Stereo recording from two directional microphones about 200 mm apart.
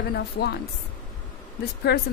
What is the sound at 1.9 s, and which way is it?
Speech, 55° left (ahead or behind).